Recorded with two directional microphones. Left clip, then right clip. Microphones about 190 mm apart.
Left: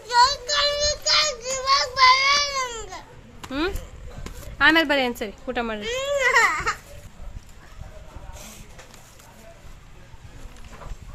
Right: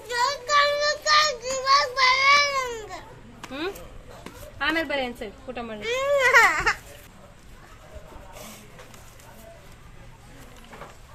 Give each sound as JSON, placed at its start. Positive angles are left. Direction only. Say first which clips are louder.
{"t": 0.1, "sound": "child singing", "louder": "left 4 dB", "side_deg": 5}
{"t": 4.5, "sound": "a woman's voice", "louder": "left 8 dB", "side_deg": 30}
{"t": 5.8, "sound": "speech", "louder": "right 3 dB", "side_deg": -5}